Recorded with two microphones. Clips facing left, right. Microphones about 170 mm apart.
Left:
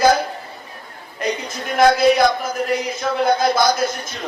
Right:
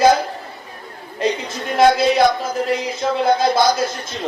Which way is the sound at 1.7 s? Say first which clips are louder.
Even; 25° right (ahead or behind).